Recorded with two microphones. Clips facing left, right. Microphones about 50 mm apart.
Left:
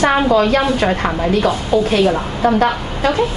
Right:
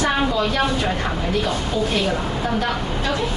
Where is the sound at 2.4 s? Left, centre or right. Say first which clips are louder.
Left 11 dB; left.